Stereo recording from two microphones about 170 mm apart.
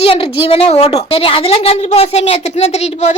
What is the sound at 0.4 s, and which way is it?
A woman's voice, 35° left (ahead or behind).